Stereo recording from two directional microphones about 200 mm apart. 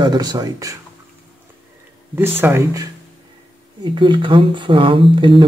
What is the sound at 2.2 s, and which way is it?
Speech, 10° right (ahead or behind).